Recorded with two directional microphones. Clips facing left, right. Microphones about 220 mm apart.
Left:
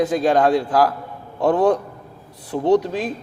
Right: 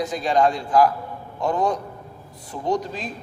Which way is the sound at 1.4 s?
60° left (ahead or behind).